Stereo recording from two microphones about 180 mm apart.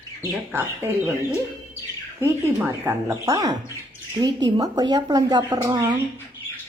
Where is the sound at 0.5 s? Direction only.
15° right (ahead or behind).